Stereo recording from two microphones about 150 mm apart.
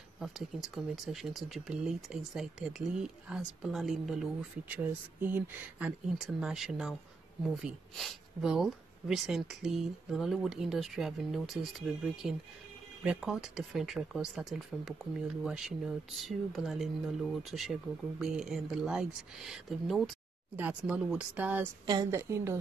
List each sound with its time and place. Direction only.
0.2 s speech: centre (ahead or behind)
4.7 s speech: 15° right (ahead or behind)
20.5 s speech: 10° right (ahead or behind)
21.8 s a woman's voice: 25° right (ahead or behind)